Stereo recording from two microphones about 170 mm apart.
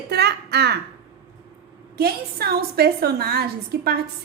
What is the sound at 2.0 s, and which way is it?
A woman's voice, 65° right (ahead or behind).